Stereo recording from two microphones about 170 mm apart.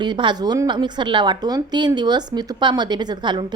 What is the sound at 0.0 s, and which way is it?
A woman's voice, 25° right (ahead or behind).